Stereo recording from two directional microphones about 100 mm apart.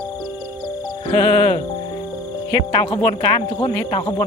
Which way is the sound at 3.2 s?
70° left (ahead or behind).